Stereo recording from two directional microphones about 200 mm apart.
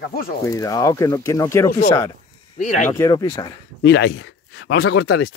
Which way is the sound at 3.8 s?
55° left (ahead or behind).